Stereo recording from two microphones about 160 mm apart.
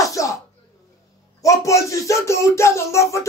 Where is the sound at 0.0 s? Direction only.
20° left (ahead or behind).